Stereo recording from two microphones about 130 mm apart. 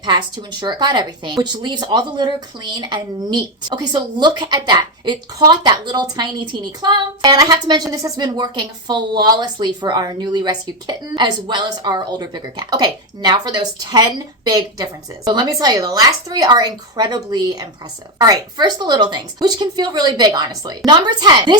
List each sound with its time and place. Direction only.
0.0 s speech: 35° right (ahead or behind)